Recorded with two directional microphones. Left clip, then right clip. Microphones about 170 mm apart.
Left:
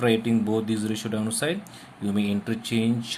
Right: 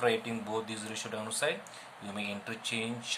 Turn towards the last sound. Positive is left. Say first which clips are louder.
# left 7 dB
turn(degrees=25)  # may be behind; listen again after turning